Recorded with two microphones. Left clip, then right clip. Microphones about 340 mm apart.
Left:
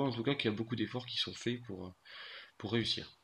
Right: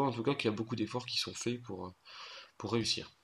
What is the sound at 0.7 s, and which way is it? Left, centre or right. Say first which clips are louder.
Speech: right 1 dB; centre.